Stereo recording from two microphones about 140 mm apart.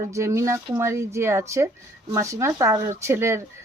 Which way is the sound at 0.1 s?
20° right (ahead or behind).